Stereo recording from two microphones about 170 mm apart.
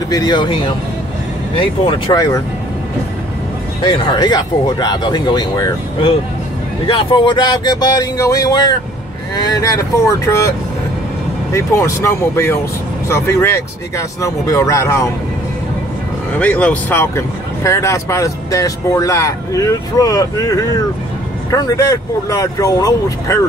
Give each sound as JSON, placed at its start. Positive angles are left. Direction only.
{"t": 0.1, "sound": "speech", "side_deg": 25}
{"t": 3.8, "sound": "speech", "side_deg": 30}
{"t": 11.5, "sound": "speech", "side_deg": 15}
{"t": 16.3, "sound": "speech", "side_deg": 10}